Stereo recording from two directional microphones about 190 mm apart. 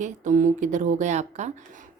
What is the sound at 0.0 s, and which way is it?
Speech, 40° right (ahead or behind).